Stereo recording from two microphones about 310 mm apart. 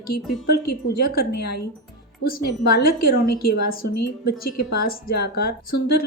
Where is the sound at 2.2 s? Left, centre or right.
Left.